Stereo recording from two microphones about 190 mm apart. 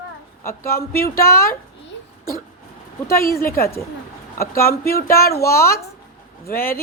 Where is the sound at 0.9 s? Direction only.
50° left (ahead or behind).